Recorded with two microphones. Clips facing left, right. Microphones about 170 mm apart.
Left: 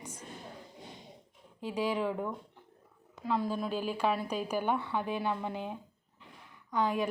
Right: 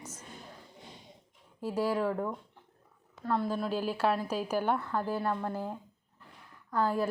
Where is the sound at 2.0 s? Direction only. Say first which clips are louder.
Right 2 dB; centre (ahead or behind).